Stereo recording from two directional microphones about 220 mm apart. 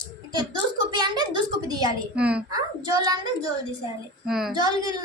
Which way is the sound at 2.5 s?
15° right (ahead or behind).